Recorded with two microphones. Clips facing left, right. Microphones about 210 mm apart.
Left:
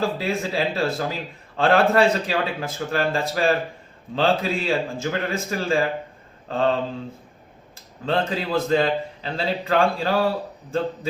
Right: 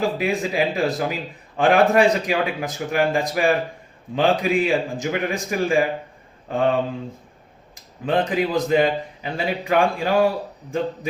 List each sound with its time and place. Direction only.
0.0 s a man's voice: 15° right (ahead or behind)
7.8 s a man's voice: 15° right (ahead or behind)